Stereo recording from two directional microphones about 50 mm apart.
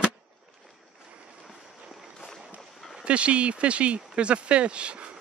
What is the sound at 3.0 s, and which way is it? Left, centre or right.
Speech, right.